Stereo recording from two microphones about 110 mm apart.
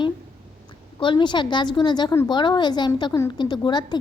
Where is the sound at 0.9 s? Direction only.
50° left (ahead or behind).